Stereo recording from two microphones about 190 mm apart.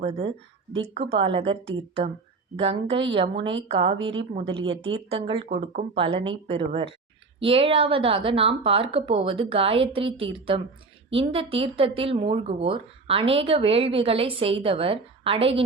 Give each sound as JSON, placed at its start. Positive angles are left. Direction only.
{"t": 0.9, "sound": "a woman's voice", "side_deg": -30}
{"t": 2.6, "sound": "a woman's voice", "side_deg": -30}